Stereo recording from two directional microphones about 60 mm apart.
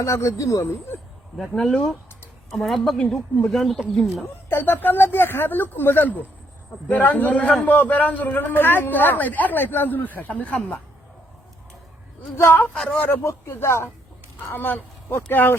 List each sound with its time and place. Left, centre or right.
0.0 s speech: left
0.6 s speech: left
1.4 s speech: centre
4.4 s a man's voice: left
12.5 s speech: left
12.7 s speech: centre
13.2 s speech: left